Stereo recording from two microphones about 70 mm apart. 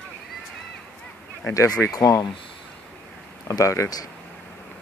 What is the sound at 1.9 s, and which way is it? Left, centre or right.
Speech, left.